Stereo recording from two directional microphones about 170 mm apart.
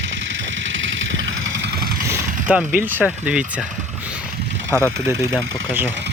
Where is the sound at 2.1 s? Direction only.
10° right (ahead or behind).